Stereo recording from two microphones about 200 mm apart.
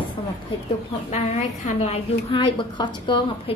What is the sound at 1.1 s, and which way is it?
A woman's voice, 35° left (ahead or behind).